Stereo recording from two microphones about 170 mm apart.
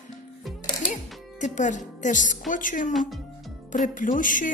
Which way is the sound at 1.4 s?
45° left (ahead or behind).